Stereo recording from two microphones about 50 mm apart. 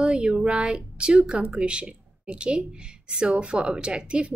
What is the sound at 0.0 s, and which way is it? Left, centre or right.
Speech, right.